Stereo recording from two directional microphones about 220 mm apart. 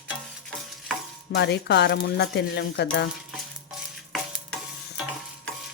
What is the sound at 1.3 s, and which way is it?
Speech, 50° left (ahead or behind).